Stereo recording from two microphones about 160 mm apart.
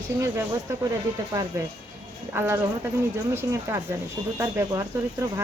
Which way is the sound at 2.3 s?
15° right (ahead or behind).